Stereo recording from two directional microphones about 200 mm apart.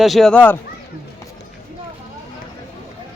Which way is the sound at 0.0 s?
Centre (ahead or behind).